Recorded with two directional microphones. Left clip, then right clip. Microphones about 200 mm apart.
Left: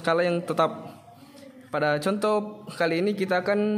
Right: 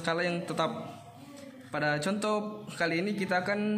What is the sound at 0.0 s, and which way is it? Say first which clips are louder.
A man's voice: left 7 dB; 55° left (ahead or behind).